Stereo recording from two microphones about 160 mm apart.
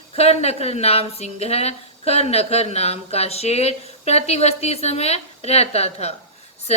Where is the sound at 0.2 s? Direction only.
40° left (ahead or behind).